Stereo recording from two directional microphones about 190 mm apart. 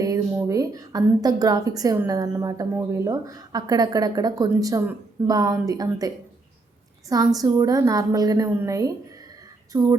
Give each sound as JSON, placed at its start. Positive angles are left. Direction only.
{"t": 0.0, "sound": "a woman's voice", "side_deg": -15}
{"t": 7.3, "sound": "a woman's voice", "side_deg": -20}